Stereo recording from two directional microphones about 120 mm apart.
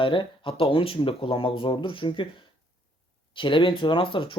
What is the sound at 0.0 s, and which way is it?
Speech, 45° left (ahead or behind).